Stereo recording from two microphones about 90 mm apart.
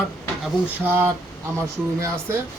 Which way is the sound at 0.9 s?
25° right (ahead or behind).